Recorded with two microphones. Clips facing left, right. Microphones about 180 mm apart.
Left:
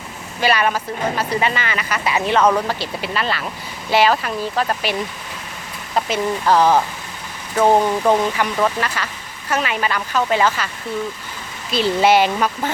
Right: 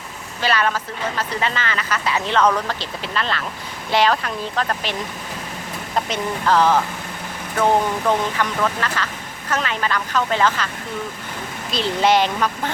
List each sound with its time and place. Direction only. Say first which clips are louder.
0.4 s speech: left 3 dB; 15° left (ahead or behind)
6.1 s speech: left 3 dB; 10° left (ahead or behind)
8.0 s speech: left 3 dB; 10° left (ahead or behind)
11.7 s speech: left 3 dB; 5° left (ahead or behind)